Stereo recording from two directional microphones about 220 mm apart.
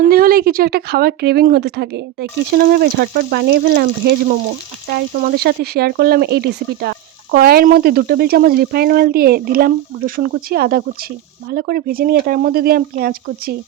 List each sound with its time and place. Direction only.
0.1 s speech: 40° right (ahead or behind)